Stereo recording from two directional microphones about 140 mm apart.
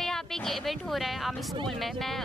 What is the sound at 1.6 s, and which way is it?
Speech, centre (ahead or behind).